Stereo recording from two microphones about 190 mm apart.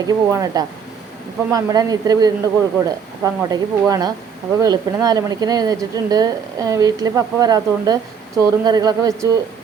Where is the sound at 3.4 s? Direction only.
20° right (ahead or behind).